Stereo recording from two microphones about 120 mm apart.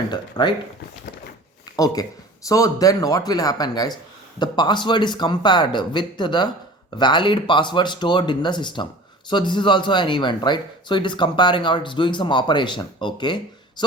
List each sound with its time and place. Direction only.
0.1 s speech: 40° left (ahead or behind)
1.7 s speech: 30° left (ahead or behind)